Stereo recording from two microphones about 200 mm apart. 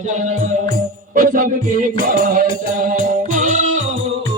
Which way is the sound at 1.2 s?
45° right (ahead or behind).